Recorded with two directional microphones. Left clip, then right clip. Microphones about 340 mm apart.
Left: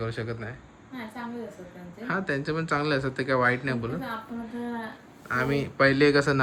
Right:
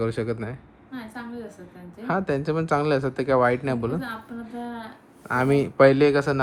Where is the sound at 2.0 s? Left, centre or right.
Centre.